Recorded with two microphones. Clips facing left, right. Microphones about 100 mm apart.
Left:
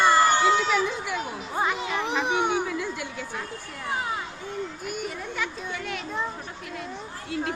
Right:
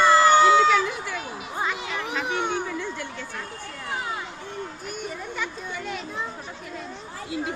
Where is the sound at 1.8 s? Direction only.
20° left (ahead or behind).